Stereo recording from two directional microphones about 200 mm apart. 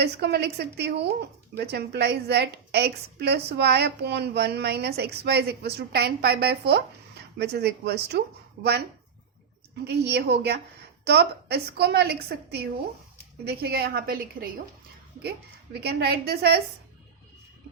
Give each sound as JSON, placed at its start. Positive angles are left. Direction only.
{"t": 0.0, "sound": "a woman's voice", "side_deg": -55}
{"t": 9.8, "sound": "a woman's voice", "side_deg": -55}
{"t": 15.8, "sound": "a woman's voice", "side_deg": -55}